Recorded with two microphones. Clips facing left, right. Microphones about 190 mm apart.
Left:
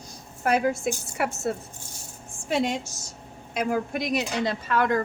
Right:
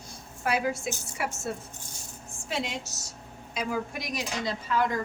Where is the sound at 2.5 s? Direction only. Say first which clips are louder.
Left 7 dB; 50° left (ahead or behind).